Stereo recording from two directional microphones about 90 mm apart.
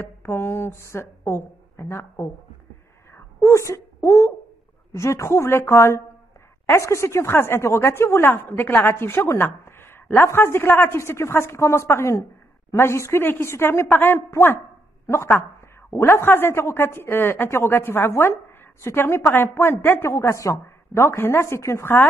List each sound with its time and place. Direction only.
0.0 s speech: 25° left (ahead or behind)
3.4 s a woman's voice: 30° left (ahead or behind)